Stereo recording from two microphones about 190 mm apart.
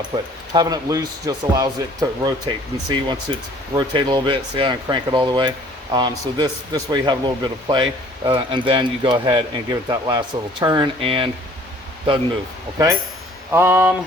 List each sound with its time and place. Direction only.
0.1 s speech: 20° right (ahead or behind)
13.5 s mantra: 10° right (ahead or behind)